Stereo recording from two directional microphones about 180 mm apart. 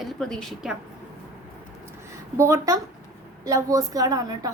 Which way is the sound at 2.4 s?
15° right (ahead or behind).